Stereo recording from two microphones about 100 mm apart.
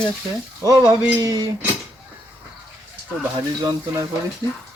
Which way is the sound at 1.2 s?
40° right (ahead or behind).